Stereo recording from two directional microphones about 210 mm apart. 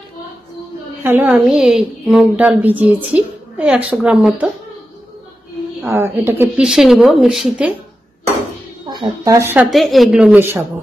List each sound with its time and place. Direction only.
1.0 s a woman's voice: 10° right (ahead or behind)
5.9 s speech: 10° right (ahead or behind)
8.8 s speech: 20° right (ahead or behind)
9.7 s speech: centre (ahead or behind)